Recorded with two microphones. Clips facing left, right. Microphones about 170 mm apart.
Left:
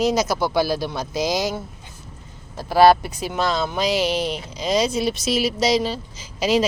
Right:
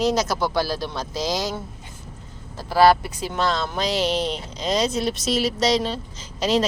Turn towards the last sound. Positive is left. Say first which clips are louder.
# left 2 dB
turn(degrees=5)  # may be behind; listen again after turning